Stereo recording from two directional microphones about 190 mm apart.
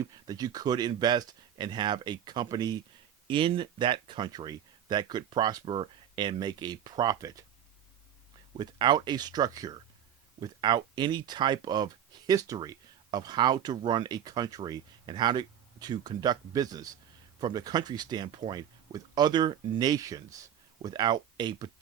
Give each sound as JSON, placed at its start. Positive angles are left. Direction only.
{"t": 0.0, "sound": "speech", "side_deg": -20}
{"t": 8.5, "sound": "speech", "side_deg": -25}